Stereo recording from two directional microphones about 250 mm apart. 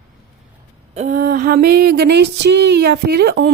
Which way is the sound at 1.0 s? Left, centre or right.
Right.